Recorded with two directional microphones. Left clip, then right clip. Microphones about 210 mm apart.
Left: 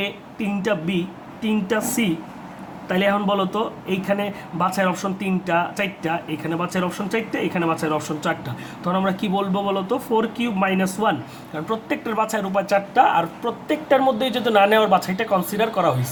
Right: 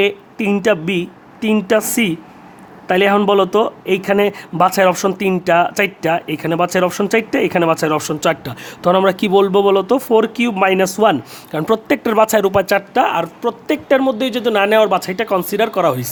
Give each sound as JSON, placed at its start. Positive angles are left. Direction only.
{"t": 0.0, "sound": "speech", "side_deg": -50}